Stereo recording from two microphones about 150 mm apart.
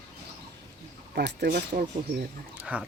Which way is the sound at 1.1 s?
85° right.